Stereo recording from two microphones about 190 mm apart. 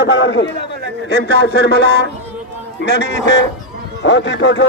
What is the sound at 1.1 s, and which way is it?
A man's voice, 60° left (ahead or behind).